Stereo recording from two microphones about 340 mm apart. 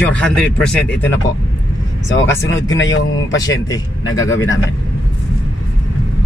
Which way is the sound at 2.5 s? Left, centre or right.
Left.